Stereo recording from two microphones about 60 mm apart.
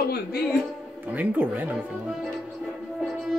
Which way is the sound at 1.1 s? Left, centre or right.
Right.